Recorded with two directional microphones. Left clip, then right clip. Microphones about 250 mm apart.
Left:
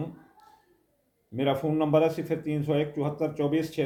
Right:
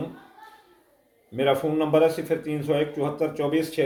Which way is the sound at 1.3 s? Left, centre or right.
Centre.